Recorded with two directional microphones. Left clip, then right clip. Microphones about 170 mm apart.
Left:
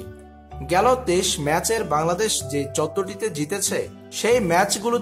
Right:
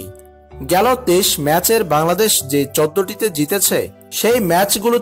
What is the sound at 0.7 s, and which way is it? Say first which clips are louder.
Speech: right 4 dB; 35° right (ahead or behind).